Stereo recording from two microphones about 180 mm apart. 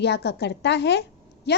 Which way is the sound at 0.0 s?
70° left (ahead or behind).